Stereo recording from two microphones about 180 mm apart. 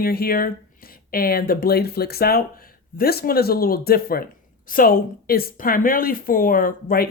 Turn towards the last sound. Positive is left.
turn(degrees=55)  # may be behind; listen again after turning